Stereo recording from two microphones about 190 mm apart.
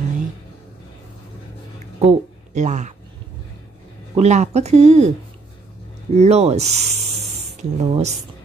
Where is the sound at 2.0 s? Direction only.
35° right (ahead or behind).